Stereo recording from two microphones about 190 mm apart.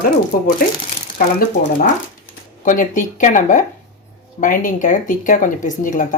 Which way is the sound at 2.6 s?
45° left (ahead or behind).